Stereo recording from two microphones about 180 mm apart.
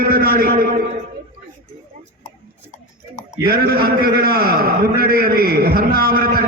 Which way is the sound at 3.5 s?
60° right (ahead or behind).